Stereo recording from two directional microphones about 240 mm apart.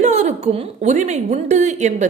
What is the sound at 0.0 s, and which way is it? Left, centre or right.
A woman's voice, right.